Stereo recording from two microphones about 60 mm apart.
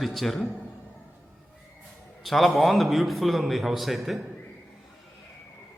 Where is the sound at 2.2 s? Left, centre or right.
Centre.